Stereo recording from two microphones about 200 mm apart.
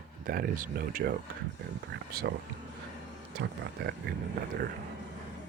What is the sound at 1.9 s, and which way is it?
Speech, 55° right (ahead or behind).